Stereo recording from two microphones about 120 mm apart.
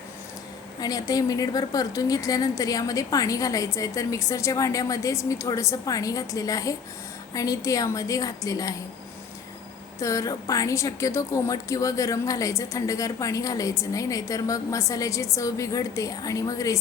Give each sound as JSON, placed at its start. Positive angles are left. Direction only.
{"t": 0.8, "sound": "a woman's voice", "side_deg": 30}
{"t": 10.0, "sound": "a woman's voice", "side_deg": 25}